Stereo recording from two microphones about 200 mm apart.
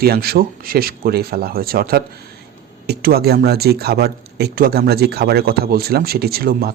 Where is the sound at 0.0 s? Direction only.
50° right (ahead or behind).